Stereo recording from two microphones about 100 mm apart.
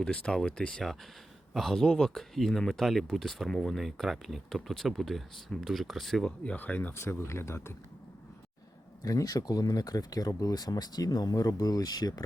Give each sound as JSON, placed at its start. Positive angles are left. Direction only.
{"t": 0.0, "sound": "speech", "side_deg": 10}
{"t": 6.4, "sound": "speech", "side_deg": 15}
{"t": 9.0, "sound": "speech", "side_deg": 35}